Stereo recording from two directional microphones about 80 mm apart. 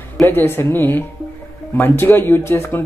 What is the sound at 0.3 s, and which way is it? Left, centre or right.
A man's voice, left.